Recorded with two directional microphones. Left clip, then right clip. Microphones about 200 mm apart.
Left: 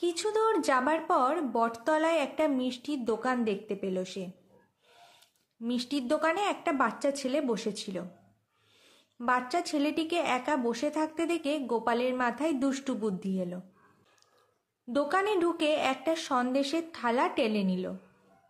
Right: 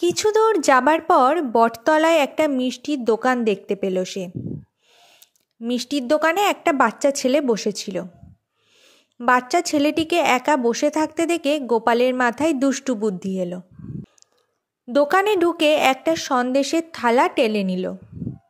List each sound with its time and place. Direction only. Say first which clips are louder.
0.0 s a woman's voice: right 11 dB; 40° right (ahead or behind)
5.6 s a woman's voice: right 9 dB; 40° right (ahead or behind)
9.2 s a woman's voice: right 11 dB; 40° right (ahead or behind)
14.9 s a woman's voice: right 11 dB; 35° right (ahead or behind)